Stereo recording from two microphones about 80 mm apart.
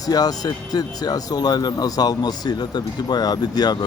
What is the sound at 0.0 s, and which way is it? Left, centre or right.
Speech, left.